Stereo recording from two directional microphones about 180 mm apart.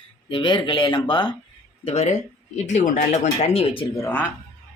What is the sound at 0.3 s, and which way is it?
Speech, 25° left (ahead or behind).